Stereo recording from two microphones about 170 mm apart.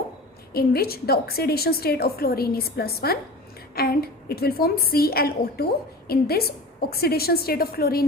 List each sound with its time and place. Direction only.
0.5 s a woman's voice: 65° left (ahead or behind)